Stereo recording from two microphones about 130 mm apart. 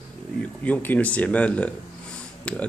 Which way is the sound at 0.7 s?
10° left (ahead or behind).